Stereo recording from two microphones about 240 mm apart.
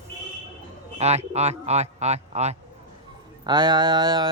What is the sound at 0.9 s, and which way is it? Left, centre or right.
Speech, right.